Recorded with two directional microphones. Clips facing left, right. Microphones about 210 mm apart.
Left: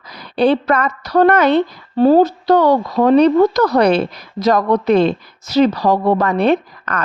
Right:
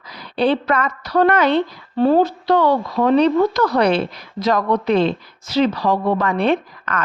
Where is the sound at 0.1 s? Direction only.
45° left (ahead or behind).